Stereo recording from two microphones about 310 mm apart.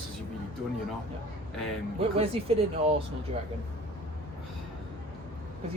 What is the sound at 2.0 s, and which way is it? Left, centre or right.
Speech, centre.